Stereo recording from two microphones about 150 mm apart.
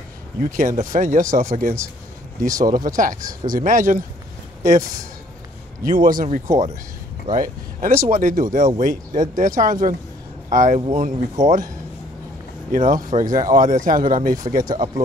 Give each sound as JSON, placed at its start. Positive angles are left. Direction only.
{"t": 0.4, "sound": "speech", "side_deg": -65}
{"t": 6.4, "sound": "speech", "side_deg": -20}
{"t": 7.3, "sound": "speech", "side_deg": -65}
{"t": 12.7, "sound": "speech", "side_deg": -65}